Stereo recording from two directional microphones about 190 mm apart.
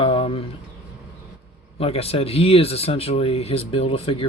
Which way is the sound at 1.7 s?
30° left (ahead or behind).